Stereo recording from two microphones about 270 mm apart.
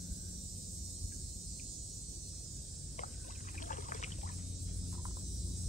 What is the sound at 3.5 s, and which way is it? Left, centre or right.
Pour, left.